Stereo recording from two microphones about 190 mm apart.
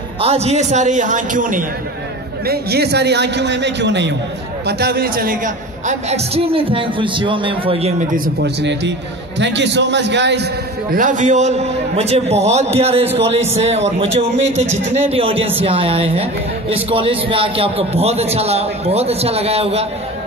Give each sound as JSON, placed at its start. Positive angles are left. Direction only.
{"t": 0.2, "sound": "speech", "side_deg": -35}
{"t": 2.4, "sound": "a man's voice", "side_deg": -55}
{"t": 4.6, "sound": "speech", "side_deg": -55}
{"t": 8.4, "sound": "a man's voice", "side_deg": -65}
{"t": 11.0, "sound": "speech", "side_deg": -40}